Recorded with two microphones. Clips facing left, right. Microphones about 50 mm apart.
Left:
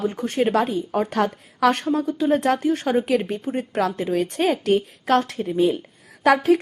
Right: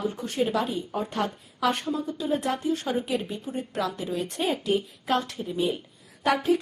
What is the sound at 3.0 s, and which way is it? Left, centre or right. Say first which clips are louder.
A woman's voice: left 7 dB; left.